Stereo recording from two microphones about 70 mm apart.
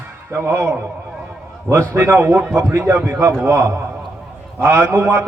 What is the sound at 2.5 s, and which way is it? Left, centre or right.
A man's voice, right.